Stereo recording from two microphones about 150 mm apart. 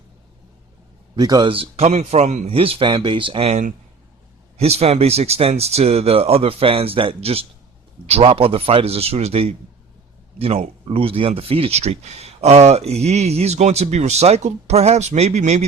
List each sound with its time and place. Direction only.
1.1 s speech: 30° right (ahead or behind); by 15.6 s 50° right (ahead or behind)